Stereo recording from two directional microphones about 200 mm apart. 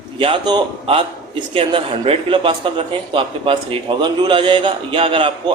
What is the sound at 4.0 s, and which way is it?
A man's voice, 25° right (ahead or behind).